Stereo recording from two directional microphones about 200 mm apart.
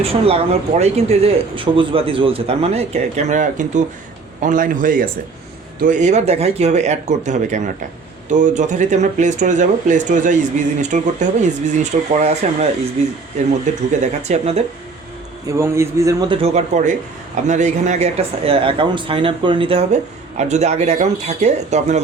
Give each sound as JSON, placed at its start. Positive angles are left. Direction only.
{"t": 0.0, "sound": "speech", "side_deg": -30}
{"t": 13.7, "sound": "speech", "side_deg": -40}
{"t": 15.5, "sound": "a man's voice", "side_deg": -15}
{"t": 16.4, "sound": "speech", "side_deg": -35}